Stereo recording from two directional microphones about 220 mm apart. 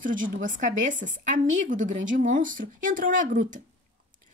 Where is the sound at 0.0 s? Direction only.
35° right (ahead or behind).